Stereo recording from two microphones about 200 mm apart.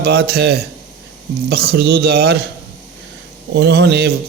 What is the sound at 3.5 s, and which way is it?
Speech, 55° right (ahead or behind).